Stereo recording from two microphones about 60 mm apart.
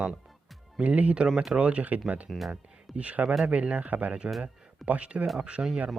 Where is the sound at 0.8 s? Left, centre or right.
Right.